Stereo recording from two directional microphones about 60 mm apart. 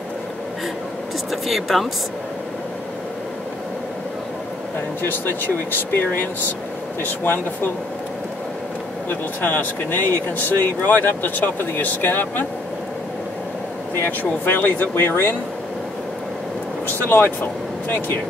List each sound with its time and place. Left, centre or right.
1.3 s speech: centre
5.0 s speech: left
9.4 s speech: left
13.9 s speech: left
16.8 s speech: left